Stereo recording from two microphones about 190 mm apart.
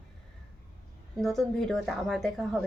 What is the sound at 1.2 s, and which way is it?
Speech, centre (ahead or behind).